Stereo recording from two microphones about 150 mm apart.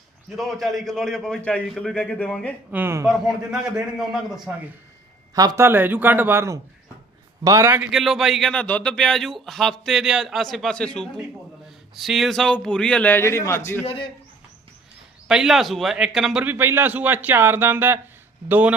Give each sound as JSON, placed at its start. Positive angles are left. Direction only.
{"t": 0.6, "sound": "a man's voice", "side_deg": 0}
{"t": 2.7, "sound": "a man's voice", "side_deg": -15}
{"t": 3.1, "sound": "a man's voice", "side_deg": -5}
{"t": 5.3, "sound": "a man's voice", "side_deg": -25}
{"t": 7.8, "sound": "a man's voice", "side_deg": -5}
{"t": 13.8, "sound": "a man's voice", "side_deg": 35}
{"t": 15.3, "sound": "a man's voice", "side_deg": -5}